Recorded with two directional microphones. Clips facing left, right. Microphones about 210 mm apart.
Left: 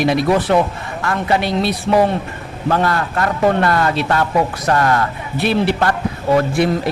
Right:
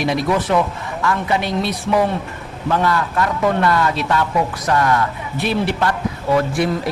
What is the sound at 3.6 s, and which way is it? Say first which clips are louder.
Speech: left 1 dB; 55° left (ahead or behind).